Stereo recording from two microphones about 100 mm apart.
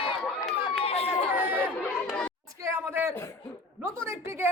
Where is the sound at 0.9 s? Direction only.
85° left.